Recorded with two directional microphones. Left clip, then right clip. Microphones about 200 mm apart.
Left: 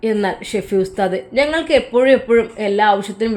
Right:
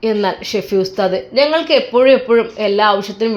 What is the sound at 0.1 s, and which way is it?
Speech, 20° left (ahead or behind).